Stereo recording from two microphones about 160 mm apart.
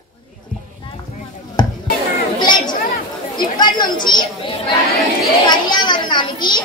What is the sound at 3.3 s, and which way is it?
A woman's voice, 30° left (ahead or behind).